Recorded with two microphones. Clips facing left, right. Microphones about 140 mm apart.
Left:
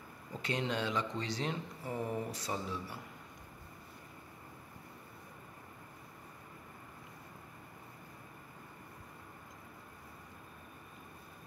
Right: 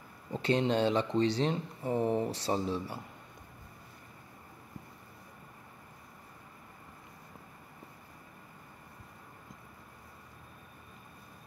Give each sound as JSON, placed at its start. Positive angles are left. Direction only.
{"t": 0.3, "sound": "speech", "side_deg": -30}